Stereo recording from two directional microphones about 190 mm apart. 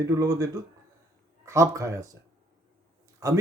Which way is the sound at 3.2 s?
20° right (ahead or behind).